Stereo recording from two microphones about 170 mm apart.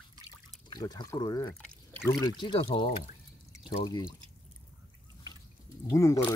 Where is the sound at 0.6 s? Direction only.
25° left (ahead or behind).